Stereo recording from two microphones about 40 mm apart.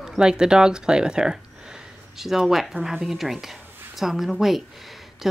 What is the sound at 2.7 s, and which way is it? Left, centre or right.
Speech, centre.